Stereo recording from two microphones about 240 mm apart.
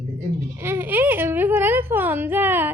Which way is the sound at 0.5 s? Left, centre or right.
Centre.